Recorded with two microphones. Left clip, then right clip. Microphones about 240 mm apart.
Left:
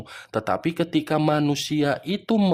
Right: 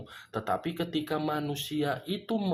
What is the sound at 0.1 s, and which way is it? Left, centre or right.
Speech, left.